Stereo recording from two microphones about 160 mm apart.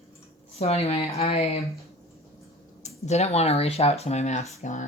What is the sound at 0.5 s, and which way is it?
Speech, 40° left (ahead or behind).